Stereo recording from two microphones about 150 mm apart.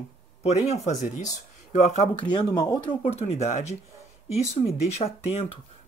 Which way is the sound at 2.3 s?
30° left (ahead or behind).